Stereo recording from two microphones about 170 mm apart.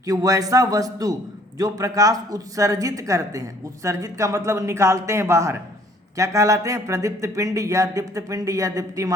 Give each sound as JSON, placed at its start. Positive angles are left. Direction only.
{"t": 0.0, "sound": "speech", "side_deg": -20}